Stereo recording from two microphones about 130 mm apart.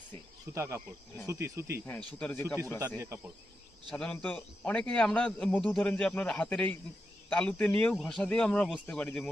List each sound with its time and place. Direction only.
0.5 s speech: 20° right (ahead or behind)
1.9 s speech: 10° left (ahead or behind)
3.8 s speech: 10° left (ahead or behind)